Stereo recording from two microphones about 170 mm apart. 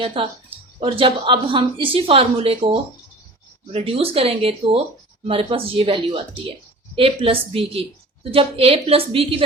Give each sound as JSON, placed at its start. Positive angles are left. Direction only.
{"t": 0.0, "sound": "a woman's voice", "side_deg": -35}
{"t": 3.7, "sound": "a woman's voice", "side_deg": -35}